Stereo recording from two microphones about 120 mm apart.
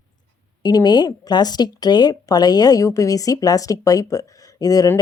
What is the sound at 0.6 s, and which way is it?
Speech, 35° left (ahead or behind).